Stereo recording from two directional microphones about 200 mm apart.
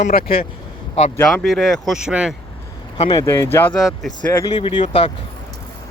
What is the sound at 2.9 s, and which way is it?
Speech, 20° left (ahead or behind).